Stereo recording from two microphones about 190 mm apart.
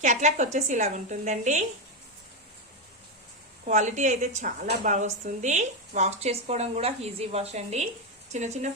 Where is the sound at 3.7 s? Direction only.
40° right (ahead or behind).